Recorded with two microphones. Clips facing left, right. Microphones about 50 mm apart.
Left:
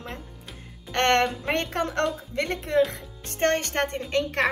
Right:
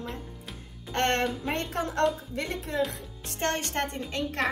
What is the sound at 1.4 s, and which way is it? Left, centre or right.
Speech, left.